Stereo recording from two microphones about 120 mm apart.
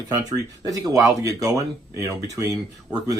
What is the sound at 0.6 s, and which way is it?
Speech, 30° right (ahead or behind).